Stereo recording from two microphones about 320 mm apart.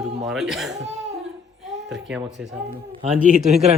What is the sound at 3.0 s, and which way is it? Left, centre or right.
Speech, right.